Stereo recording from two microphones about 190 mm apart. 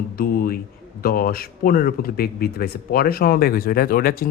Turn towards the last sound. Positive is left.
turn(degrees=50)  # may be behind; listen again after turning